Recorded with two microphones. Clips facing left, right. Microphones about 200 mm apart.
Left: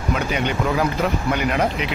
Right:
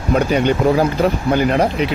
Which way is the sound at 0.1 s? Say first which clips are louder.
Right 8 dB; 35° right (ahead or behind).